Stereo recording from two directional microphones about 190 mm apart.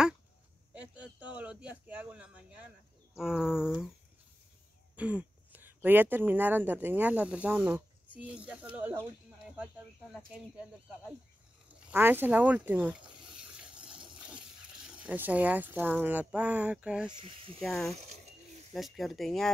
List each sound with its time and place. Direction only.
0.7 s speech: 5° right (ahead or behind)
4.9 s speech: 5° right (ahead or behind)
10.1 s speech: 5° right (ahead or behind)
11.9 s a sound: 10° right (ahead or behind)
14.1 s speech: 5° right (ahead or behind)
17.9 s speech: 35° right (ahead or behind)
18.7 s speech: centre (ahead or behind)